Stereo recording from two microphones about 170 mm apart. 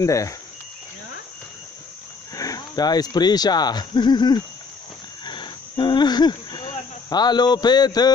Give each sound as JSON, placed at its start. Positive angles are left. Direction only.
{"t": 0.0, "sound": "speech", "side_deg": 20}
{"t": 2.3, "sound": "speech", "side_deg": 20}
{"t": 5.2, "sound": "cricket", "side_deg": 25}